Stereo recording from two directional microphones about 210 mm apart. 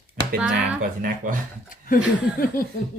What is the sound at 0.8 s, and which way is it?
Speech, 40° right (ahead or behind).